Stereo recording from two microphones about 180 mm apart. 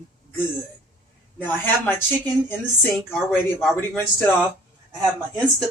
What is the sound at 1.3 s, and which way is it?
A woman's voice, 10° left (ahead or behind).